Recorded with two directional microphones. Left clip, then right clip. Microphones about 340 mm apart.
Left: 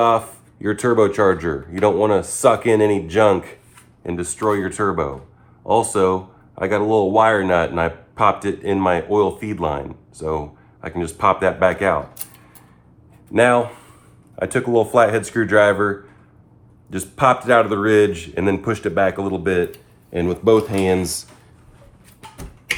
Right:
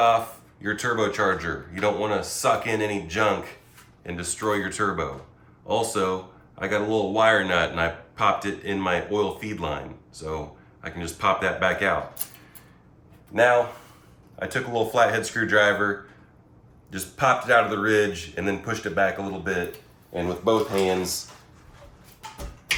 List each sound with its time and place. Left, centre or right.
0.6 s speech: centre
14.3 s speech: centre
16.9 s speech: centre
20.1 s speech: left